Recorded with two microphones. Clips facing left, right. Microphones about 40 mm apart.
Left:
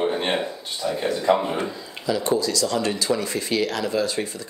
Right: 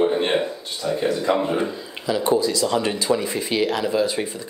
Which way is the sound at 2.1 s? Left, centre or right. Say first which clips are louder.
Right 2 dB; centre.